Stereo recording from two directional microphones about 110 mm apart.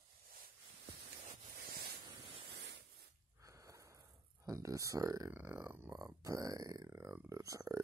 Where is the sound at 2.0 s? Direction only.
55° right (ahead or behind).